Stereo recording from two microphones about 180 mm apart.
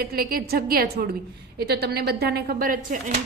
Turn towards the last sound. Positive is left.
turn(degrees=-50)  # may be behind; listen again after turning